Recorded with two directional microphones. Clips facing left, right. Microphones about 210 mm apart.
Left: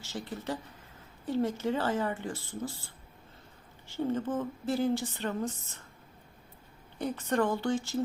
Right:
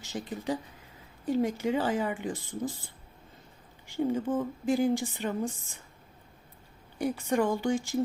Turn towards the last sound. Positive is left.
turn(degrees=-15)  # may be behind; listen again after turning